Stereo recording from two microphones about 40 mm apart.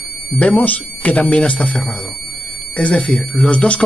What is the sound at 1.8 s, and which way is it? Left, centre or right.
Music, centre.